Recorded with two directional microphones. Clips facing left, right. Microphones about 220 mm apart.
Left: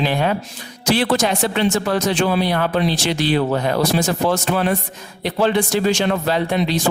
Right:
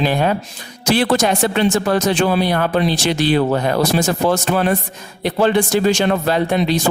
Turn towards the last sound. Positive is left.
turn(degrees=-45)  # may be behind; listen again after turning